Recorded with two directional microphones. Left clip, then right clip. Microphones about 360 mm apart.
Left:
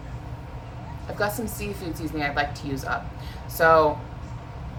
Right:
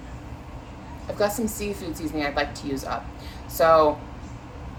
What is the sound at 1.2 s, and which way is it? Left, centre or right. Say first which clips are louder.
A woman's voice: right 3 dB; centre.